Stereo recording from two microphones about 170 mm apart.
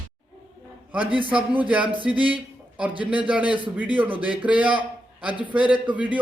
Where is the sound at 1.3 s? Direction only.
10° right (ahead or behind).